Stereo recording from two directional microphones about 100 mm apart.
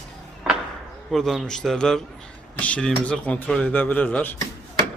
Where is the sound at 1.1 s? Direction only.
Centre (ahead or behind).